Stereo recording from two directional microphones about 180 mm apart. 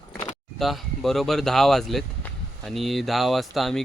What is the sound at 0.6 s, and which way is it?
Speech, centre (ahead or behind).